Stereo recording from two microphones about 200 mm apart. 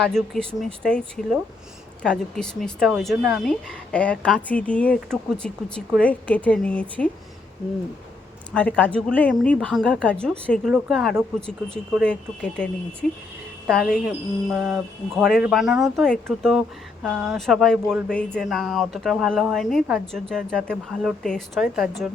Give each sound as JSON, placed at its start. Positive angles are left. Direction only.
{"t": 0.0, "sound": "a woman's voice", "side_deg": 5}
{"t": 8.5, "sound": "speech", "side_deg": 5}